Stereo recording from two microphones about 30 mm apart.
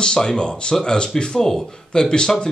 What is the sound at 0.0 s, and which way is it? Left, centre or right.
Speech, left.